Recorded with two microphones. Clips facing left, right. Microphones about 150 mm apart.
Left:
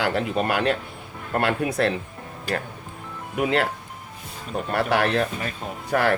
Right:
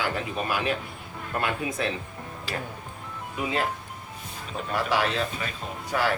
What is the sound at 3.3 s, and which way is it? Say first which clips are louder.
Speech: left 6 dB; 70° left (ahead or behind).